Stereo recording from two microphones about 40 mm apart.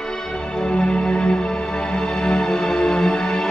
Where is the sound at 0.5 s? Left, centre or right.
Left.